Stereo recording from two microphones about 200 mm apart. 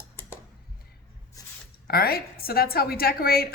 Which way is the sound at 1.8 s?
50° left (ahead or behind).